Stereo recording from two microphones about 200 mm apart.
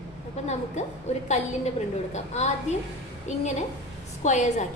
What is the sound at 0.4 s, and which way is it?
Speech, 35° left (ahead or behind).